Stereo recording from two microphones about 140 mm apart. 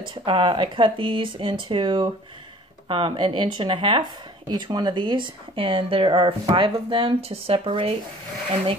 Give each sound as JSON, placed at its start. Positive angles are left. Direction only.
{"t": 0.1, "sound": "speech", "side_deg": -35}